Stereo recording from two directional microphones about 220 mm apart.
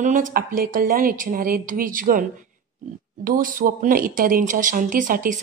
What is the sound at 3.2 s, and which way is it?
A woman's voice, 40° right (ahead or behind).